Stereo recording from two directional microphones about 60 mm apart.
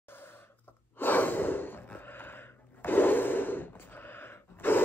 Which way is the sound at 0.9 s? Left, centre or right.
Left.